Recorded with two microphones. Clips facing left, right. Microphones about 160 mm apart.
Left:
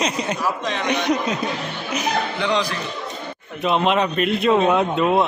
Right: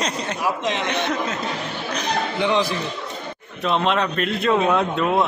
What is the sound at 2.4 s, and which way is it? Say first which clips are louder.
Speech: right 4 dB; 20° right (ahead or behind).